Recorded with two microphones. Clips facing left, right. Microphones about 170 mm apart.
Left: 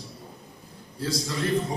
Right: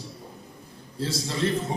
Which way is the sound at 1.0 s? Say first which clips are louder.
Even; 25° right (ahead or behind).